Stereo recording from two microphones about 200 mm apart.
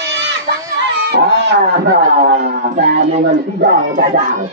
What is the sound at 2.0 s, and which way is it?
Speech, 50° right (ahead or behind).